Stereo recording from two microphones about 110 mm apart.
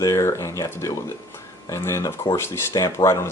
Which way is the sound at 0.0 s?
25° left (ahead or behind).